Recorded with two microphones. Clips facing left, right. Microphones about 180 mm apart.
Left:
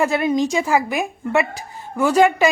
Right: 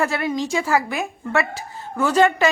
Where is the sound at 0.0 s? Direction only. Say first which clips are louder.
Left 4 dB; 20° left (ahead or behind).